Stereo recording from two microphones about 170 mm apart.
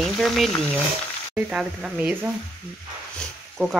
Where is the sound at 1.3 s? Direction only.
5° right (ahead or behind).